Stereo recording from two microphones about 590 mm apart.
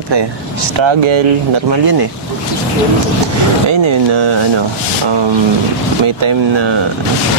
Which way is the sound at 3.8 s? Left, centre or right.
Right.